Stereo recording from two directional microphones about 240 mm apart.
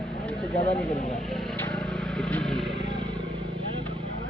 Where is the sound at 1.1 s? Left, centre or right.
Centre.